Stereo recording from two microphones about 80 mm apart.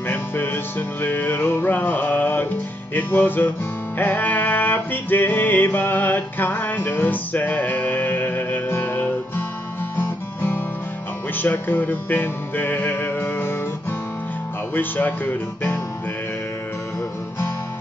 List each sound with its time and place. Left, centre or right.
0.1 s music: left
2.9 s speech: left
4.0 s music: left
9.9 s guitar: left
11.3 s music: left
14.7 s speech: left